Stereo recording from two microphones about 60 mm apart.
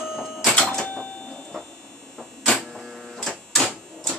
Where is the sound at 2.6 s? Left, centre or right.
Centre.